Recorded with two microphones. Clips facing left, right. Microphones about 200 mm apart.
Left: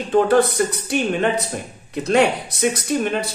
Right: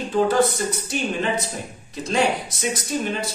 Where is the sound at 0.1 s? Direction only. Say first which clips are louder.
Left 4 dB; 60° left (ahead or behind).